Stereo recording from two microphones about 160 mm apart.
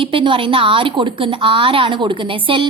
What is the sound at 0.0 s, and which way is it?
A woman's voice, 35° right (ahead or behind).